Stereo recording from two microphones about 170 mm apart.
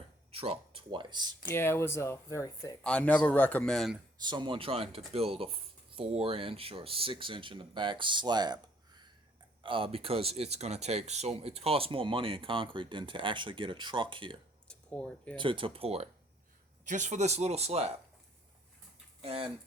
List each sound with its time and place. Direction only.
0.3 s speech: 35° right (ahead or behind)
1.5 s speech: 15° left (ahead or behind)
2.8 s speech: 5° left (ahead or behind)
4.2 s speech: 25° right (ahead or behind)
14.7 s speech: 5° left (ahead or behind)
15.4 s speech: 30° right (ahead or behind)
16.8 s speech: 45° right (ahead or behind)
19.2 s speech: 35° right (ahead or behind)